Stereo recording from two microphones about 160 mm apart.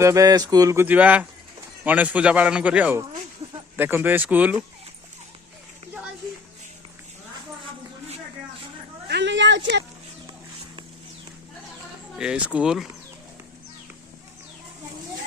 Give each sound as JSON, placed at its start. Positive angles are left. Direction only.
{"t": 0.0, "sound": "a man's voice", "side_deg": -20}
{"t": 9.0, "sound": "a sound", "side_deg": -90}
{"t": 12.1, "sound": "speech", "side_deg": -5}